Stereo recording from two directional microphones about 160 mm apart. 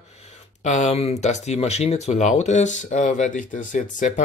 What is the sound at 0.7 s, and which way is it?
Speech, 45° left (ahead or behind).